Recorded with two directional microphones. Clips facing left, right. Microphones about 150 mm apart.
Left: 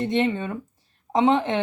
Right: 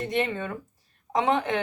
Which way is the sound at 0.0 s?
25° left (ahead or behind).